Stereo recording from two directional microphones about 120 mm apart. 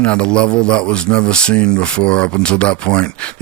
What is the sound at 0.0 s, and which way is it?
Speech, 10° left (ahead or behind).